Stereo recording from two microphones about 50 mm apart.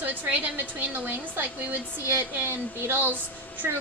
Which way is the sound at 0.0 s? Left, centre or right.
Right.